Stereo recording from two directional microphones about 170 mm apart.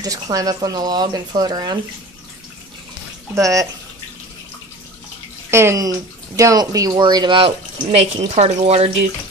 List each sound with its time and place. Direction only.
0.0 s speech: 20° right (ahead or behind)
3.3 s speech: 20° right (ahead or behind)
5.5 s speech: 15° right (ahead or behind); by 8.9 s 40° right (ahead or behind)